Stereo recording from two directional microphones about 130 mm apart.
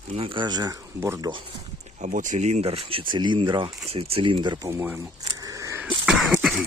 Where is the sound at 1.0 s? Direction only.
20° right (ahead or behind).